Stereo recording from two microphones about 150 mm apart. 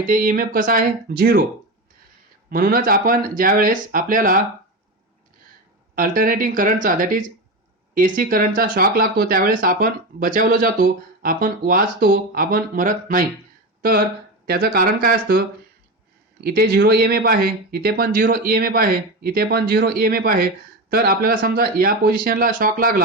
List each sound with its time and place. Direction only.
0.0 s speech: 65° right (ahead or behind)
2.5 s speech: 75° right (ahead or behind)
5.9 s speech: 70° right (ahead or behind)
14.4 s speech: 90° right; by 23.0 s 70° right (ahead or behind)